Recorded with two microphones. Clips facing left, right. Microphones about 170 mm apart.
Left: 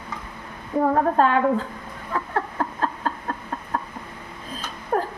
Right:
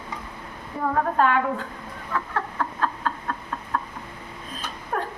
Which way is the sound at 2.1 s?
35° left (ahead or behind).